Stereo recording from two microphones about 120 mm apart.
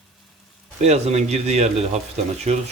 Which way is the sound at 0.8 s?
65° right (ahead or behind).